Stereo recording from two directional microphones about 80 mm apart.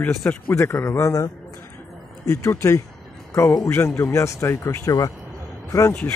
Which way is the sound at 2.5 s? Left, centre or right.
Left.